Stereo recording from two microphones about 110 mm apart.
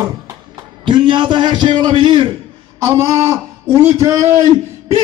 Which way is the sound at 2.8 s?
30° right (ahead or behind).